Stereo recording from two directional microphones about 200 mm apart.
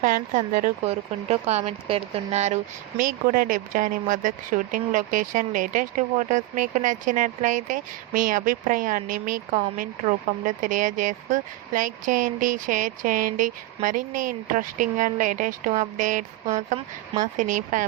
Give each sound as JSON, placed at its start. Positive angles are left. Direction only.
{"t": 0.0, "sound": "speech", "side_deg": -40}
{"t": 0.9, "sound": "speech", "side_deg": -30}